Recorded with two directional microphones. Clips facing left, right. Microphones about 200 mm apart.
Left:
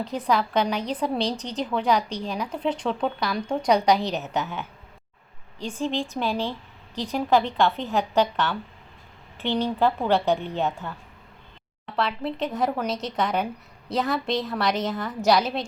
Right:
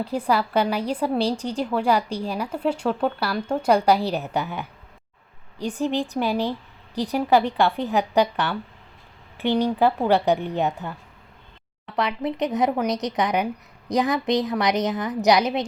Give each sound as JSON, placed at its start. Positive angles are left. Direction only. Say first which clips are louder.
{"t": 0.3, "sound": "a woman's voice", "louder": "right 1 dB", "side_deg": -5}
{"t": 11.9, "sound": "a woman's voice", "louder": "right 2 dB", "side_deg": -15}